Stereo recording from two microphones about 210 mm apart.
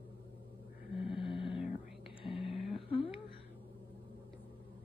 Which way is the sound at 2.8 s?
25° left (ahead or behind).